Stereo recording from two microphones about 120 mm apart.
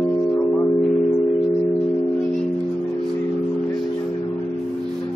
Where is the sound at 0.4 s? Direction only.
15° left (ahead or behind).